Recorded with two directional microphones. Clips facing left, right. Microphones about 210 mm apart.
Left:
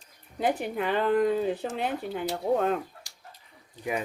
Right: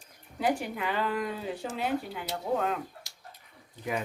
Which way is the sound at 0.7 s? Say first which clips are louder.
Left 6 dB; 45° left (ahead or behind).